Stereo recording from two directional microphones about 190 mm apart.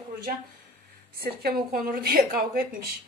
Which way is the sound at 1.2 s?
55° right (ahead or behind).